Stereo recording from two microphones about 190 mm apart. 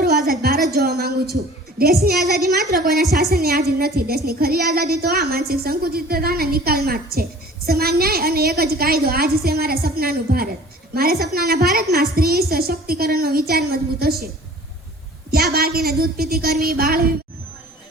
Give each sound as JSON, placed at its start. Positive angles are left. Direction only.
{"t": 0.7, "sound": "a sound", "side_deg": -55}
{"t": 1.8, "sound": "a woman's voice", "side_deg": -55}
{"t": 15.3, "sound": "a woman's voice", "side_deg": -55}